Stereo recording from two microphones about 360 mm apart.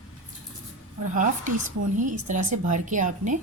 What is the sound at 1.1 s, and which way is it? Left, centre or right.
A woman's voice, right.